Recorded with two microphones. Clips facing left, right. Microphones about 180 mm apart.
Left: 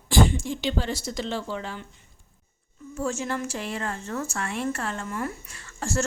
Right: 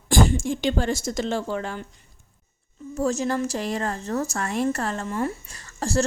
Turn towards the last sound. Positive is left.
turn(degrees=-35)  # may be behind; listen again after turning